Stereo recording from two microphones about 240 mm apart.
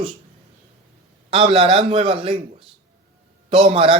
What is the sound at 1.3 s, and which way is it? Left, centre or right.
Speech, right.